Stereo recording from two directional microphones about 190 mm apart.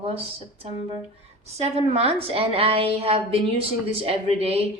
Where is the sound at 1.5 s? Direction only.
35° right (ahead or behind).